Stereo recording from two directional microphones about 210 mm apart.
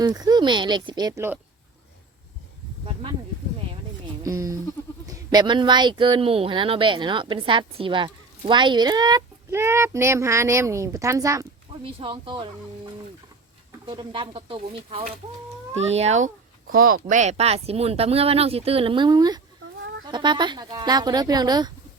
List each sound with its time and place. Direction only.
0.0 s speech: 20° right (ahead or behind)
4.2 s speech: 15° right (ahead or behind)
11.9 s speech: 25° right (ahead or behind)
13.8 s speech: 20° right (ahead or behind)
16.7 s speech: 45° right (ahead or behind); by 21.7 s 20° right (ahead or behind)